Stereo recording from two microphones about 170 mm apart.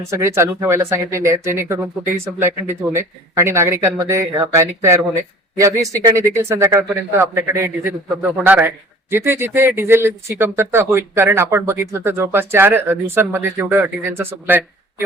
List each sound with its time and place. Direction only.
0.1 s a man's voice: 15° right (ahead or behind)